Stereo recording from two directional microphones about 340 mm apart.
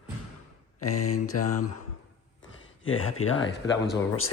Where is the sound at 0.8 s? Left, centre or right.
Left.